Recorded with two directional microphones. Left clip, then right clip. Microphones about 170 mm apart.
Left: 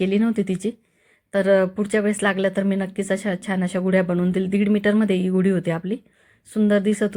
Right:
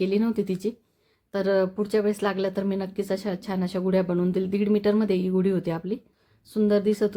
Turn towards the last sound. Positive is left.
turn(degrees=5)  # may be behind; listen again after turning